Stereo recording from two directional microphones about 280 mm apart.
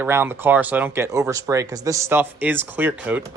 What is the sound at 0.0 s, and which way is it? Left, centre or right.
Speech, centre.